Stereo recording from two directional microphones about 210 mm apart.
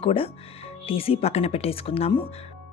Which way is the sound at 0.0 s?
25° left (ahead or behind).